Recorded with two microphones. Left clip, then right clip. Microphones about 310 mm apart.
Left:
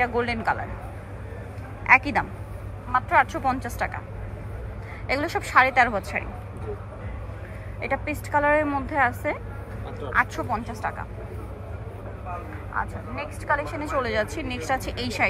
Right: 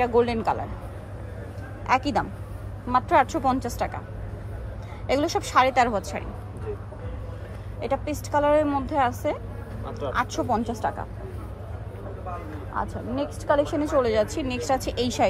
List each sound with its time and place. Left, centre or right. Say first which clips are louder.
0.0 s a woman's voice: right 2 dB; centre
1.9 s a woman's voice: left 4 dB; centre
5.0 s a woman's voice: right 2 dB; centre
7.8 s a woman's voice: even; centre
13.2 s a woman's voice: right 3 dB; centre